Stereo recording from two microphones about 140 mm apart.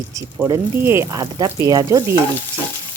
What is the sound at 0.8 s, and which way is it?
Stir, 20° right (ahead or behind).